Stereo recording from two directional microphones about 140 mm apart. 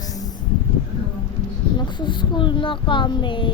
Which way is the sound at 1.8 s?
35° left (ahead or behind).